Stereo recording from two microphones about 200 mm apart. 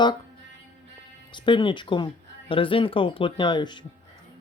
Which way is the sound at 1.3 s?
25° left (ahead or behind).